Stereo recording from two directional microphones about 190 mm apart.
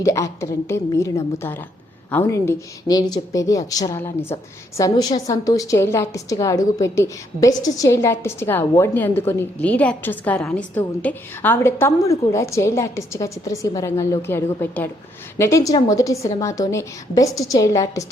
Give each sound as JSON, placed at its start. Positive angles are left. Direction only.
{"t": 0.0, "sound": "a woman's voice", "side_deg": 15}